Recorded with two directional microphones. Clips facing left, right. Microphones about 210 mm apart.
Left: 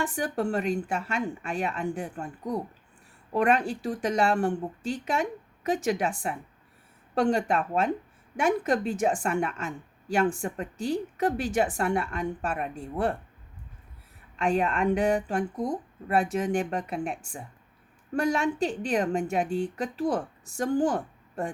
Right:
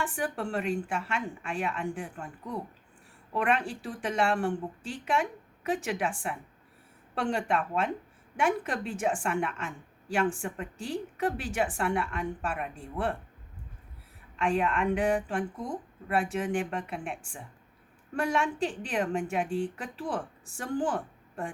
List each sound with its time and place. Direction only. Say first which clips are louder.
0.0 s a woman's voice: left 4 dB; 40° left (ahead or behind)
14.3 s a woman's voice: left 2 dB; 40° left (ahead or behind)